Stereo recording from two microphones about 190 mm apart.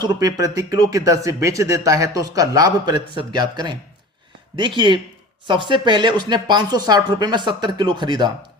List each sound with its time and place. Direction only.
0.0 s speech: 20° right (ahead or behind)